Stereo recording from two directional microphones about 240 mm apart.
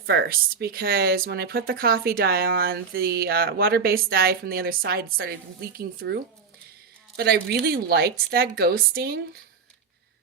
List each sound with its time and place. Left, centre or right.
0.0 s speech: right
7.4 s speech: right